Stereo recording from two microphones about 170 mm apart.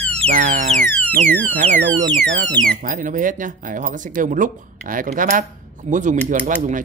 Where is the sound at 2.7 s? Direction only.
55° right (ahead or behind).